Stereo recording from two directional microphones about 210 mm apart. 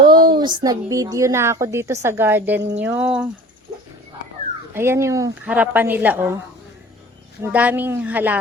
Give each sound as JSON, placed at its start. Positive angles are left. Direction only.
{"t": 0.0, "sound": "a sound", "side_deg": -20}
{"t": 0.3, "sound": "a woman's voice", "side_deg": -20}
{"t": 4.7, "sound": "a woman's voice", "side_deg": -10}
{"t": 7.4, "sound": "a woman's voice", "side_deg": -10}